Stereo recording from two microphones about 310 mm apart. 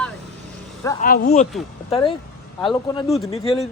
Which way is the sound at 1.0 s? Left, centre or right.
Left.